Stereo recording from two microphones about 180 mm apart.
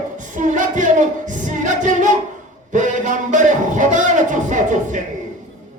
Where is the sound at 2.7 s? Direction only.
45° right (ahead or behind).